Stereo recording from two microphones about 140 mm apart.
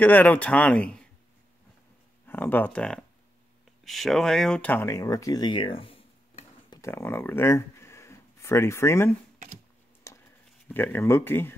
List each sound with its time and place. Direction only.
0.0 s speech: 10° left (ahead or behind)
2.2 s speech: 15° left (ahead or behind); by 6.8 s 40° left (ahead or behind)
6.8 s speech: 20° left (ahead or behind)
10.1 s a sound: 20° left (ahead or behind)
10.7 s speech: 15° left (ahead or behind)